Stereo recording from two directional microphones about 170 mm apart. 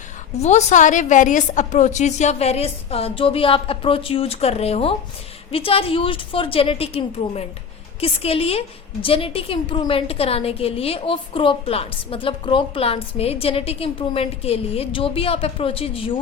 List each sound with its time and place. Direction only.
0.3 s a woman's voice: 40° left (ahead or behind)